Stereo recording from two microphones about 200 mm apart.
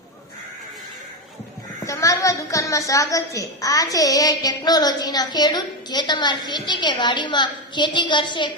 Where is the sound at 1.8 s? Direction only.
15° left (ahead or behind).